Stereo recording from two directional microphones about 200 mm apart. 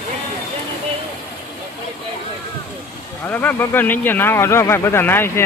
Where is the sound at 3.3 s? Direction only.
10° left (ahead or behind).